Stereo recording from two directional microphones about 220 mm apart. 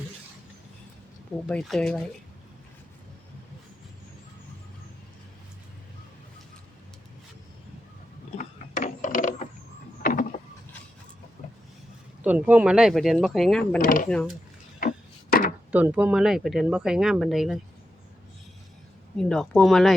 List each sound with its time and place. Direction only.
1.5 s speech: 5° left (ahead or behind)
8.4 s mechanisms: 35° left (ahead or behind)
10.0 s vehicle: 35° left (ahead or behind)
12.2 s speech: 10° right (ahead or behind)
13.7 s speech: 40° left (ahead or behind)
14.1 s speech: 5° left (ahead or behind)
14.8 s wood: 40° left (ahead or behind)
15.7 s speech: 5° right (ahead or behind)
19.1 s speech: 5° left (ahead or behind)